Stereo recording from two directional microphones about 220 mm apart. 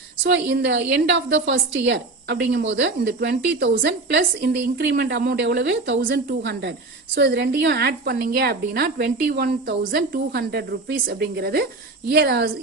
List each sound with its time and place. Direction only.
0.3 s a woman's voice: 55° right (ahead or behind)